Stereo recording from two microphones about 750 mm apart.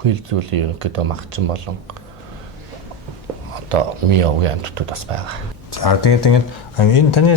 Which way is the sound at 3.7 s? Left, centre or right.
Right.